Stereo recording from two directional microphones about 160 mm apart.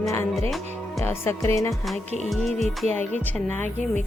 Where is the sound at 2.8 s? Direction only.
10° left (ahead or behind).